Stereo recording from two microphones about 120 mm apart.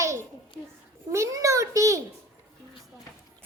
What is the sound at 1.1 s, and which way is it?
Speech, 25° right (ahead or behind).